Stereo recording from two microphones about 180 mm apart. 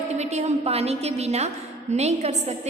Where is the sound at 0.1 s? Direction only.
40° right (ahead or behind).